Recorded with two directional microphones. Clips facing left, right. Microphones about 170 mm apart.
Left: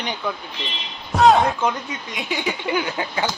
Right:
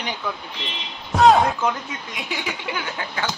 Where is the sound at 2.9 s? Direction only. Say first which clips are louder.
Left 4 dB; 20° left (ahead or behind).